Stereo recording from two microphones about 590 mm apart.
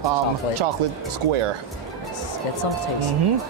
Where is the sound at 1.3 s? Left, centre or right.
Right.